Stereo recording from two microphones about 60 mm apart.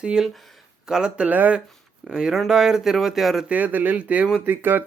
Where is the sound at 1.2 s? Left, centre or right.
Right.